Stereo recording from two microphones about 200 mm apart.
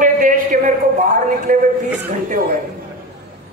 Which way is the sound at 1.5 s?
40° right (ahead or behind).